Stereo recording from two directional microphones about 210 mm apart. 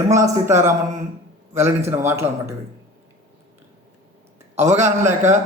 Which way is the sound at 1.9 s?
10° right (ahead or behind).